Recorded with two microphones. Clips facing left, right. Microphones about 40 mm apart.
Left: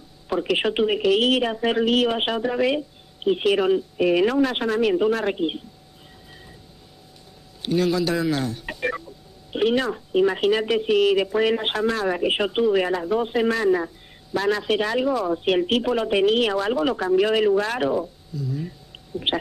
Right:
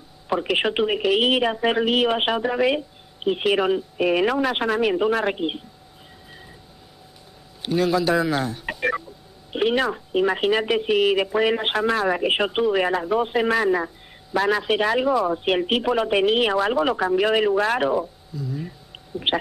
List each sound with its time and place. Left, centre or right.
0.3 s speech: centre
7.6 s a man's voice: centre